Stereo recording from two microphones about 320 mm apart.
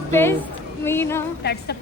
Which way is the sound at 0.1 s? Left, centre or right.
Centre.